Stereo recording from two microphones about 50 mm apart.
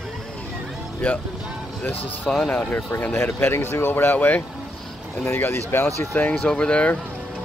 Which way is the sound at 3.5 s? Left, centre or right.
Left.